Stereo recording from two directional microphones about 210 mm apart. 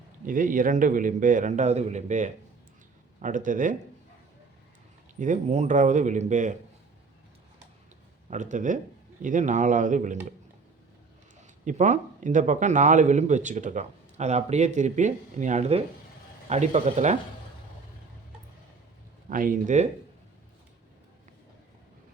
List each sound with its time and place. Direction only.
0.3 s speech: 40° right (ahead or behind)
5.2 s speech: 35° right (ahead or behind)
8.3 s speech: 35° right (ahead or behind)
11.6 s speech: 35° right (ahead or behind)
19.3 s speech: 40° right (ahead or behind)